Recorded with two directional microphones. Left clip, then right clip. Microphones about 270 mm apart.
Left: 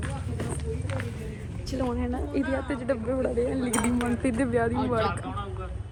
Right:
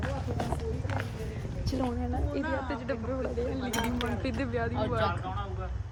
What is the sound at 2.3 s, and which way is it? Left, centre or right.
Speech, left.